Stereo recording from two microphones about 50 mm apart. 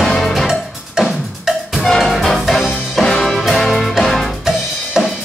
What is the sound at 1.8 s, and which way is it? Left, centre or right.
Music, centre.